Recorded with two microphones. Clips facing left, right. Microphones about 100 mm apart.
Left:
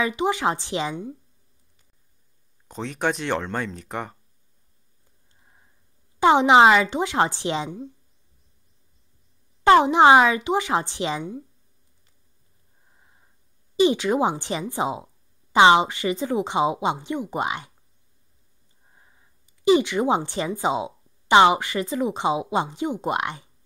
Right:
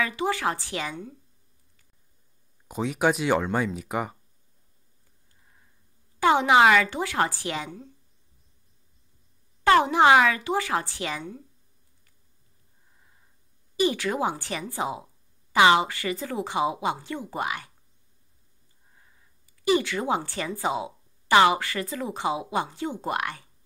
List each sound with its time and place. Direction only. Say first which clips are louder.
0.0 s speech: left 4 dB; 20° left (ahead or behind)
2.7 s speech: right 2 dB; 10° right (ahead or behind)
5.4 s sniff: left 2 dB; 25° left (ahead or behind)
6.1 s speech: left 4 dB; 20° left (ahead or behind)
9.6 s speech: left 4 dB; 20° left (ahead or behind)
12.9 s a sound: left 3 dB; 25° left (ahead or behind)
13.7 s speech: left 5 dB; 20° left (ahead or behind)
18.9 s speech: left 2 dB; 25° left (ahead or behind)